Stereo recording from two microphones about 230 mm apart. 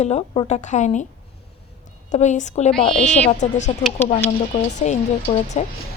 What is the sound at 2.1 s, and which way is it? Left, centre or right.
A woman's voice, left.